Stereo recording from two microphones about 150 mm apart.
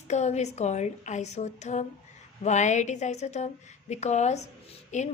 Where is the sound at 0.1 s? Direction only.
50° left (ahead or behind).